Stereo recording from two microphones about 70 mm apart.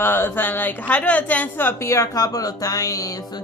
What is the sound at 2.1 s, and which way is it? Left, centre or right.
Speech, left.